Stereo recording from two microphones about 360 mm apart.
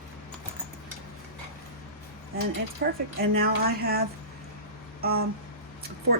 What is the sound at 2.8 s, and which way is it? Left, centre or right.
Speech, right.